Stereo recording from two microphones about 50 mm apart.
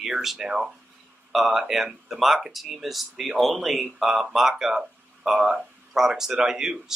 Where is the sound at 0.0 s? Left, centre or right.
Centre.